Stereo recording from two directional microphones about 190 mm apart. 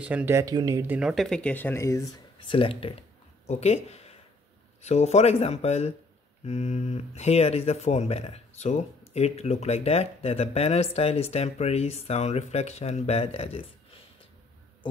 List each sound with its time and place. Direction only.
0.0 s speech: 10° right (ahead or behind); by 2.0 s 15° left (ahead or behind)
2.1 s a sound: 25° left (ahead or behind)
4.8 s speech: 35° left (ahead or behind)